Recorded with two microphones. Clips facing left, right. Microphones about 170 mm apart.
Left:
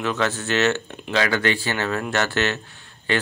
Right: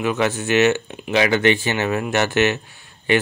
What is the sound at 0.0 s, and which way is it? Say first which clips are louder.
Speech: right 3 dB; 15° right (ahead or behind).